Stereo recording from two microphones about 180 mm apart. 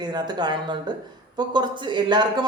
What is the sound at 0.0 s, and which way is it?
Speech, 25° right (ahead or behind).